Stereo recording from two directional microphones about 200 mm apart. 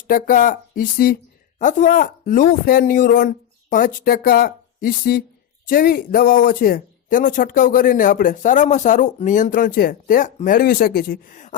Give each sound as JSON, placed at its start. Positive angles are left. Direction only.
{"t": 0.1, "sound": "speech", "side_deg": 45}